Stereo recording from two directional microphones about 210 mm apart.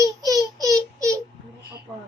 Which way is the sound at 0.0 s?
15° right (ahead or behind).